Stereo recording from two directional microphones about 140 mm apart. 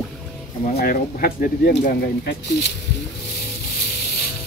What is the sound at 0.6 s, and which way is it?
Speech, 75° left (ahead or behind).